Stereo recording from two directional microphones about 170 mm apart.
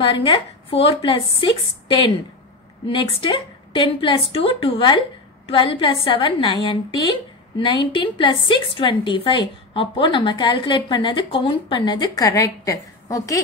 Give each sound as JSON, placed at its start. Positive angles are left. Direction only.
{"t": 0.0, "sound": "a woman's voice", "side_deg": 30}
{"t": 2.9, "sound": "a woman's voice", "side_deg": 30}